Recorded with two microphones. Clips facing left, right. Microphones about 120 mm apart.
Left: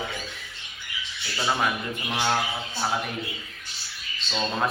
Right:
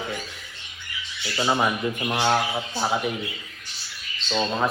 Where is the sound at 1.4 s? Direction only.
15° right (ahead or behind).